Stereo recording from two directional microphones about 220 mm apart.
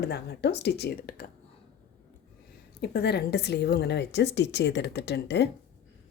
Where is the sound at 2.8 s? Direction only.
50° left (ahead or behind).